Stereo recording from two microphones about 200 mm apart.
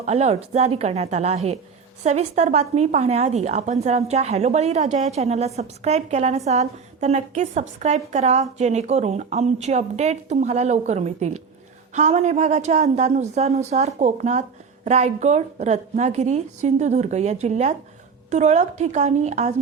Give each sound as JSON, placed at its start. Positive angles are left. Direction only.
{"t": 0.0, "sound": "a woman's voice", "side_deg": -35}